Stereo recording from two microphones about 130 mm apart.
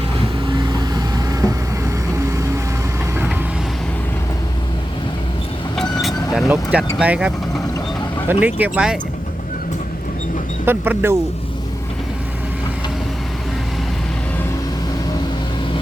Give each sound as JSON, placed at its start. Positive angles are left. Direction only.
{"t": 0.4, "sound": "vehicle", "side_deg": -35}
{"t": 2.1, "sound": "music", "side_deg": -25}
{"t": 5.7, "sound": "vehicle", "side_deg": 0}
{"t": 6.5, "sound": "speech", "side_deg": -10}
{"t": 10.7, "sound": "speech", "side_deg": -15}